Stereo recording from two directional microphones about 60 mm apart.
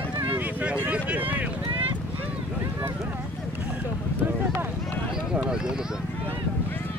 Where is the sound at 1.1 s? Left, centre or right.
Right.